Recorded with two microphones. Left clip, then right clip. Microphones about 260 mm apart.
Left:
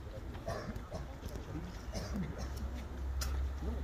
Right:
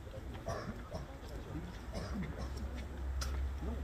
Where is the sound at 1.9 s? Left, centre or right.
Left.